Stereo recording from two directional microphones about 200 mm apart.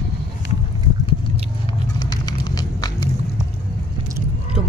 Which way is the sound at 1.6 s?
20° left (ahead or behind).